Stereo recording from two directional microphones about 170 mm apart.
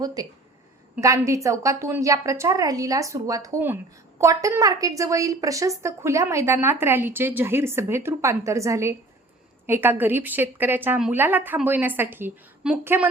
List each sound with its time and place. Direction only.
0.0 s a woman's voice: 20° right (ahead or behind)